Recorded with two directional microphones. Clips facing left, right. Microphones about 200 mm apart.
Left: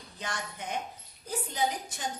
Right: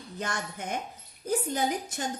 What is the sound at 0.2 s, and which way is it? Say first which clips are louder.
A woman's voice: right 4 dB; 50° right (ahead or behind).